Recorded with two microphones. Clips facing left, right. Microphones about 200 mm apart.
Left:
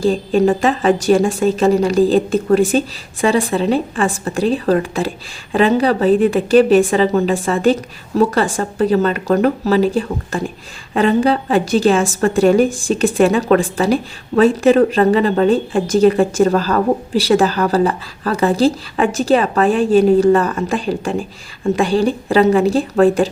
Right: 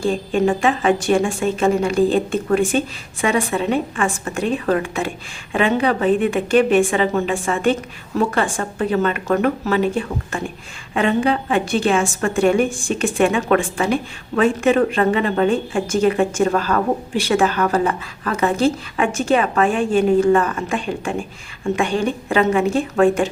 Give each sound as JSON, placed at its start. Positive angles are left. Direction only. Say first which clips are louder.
{"t": 0.0, "sound": "a woman's voice", "louder": "left 4 dB", "side_deg": 35}